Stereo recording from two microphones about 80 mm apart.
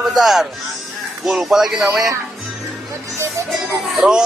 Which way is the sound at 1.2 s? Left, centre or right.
Centre.